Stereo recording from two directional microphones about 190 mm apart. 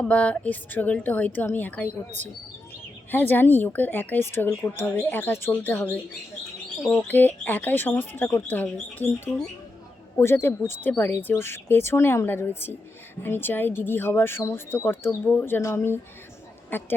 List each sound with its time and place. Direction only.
0.0 s speech: 5° left (ahead or behind)
2.0 s speech: 40° right (ahead or behind)
3.1 s speech: 10° left (ahead or behind)